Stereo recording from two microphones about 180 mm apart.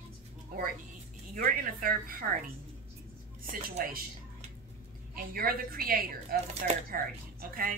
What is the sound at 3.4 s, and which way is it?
Speech, 55° right (ahead or behind).